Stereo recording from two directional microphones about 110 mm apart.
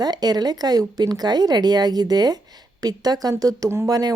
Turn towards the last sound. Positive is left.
turn(degrees=-35)  # may be behind; listen again after turning